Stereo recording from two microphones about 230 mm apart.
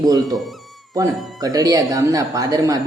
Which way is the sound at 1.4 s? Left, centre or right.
Centre.